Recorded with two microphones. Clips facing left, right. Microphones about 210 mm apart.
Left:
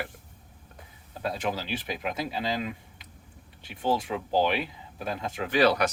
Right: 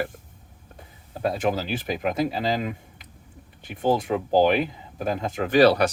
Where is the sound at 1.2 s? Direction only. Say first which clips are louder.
Right 6 dB; 50° right (ahead or behind).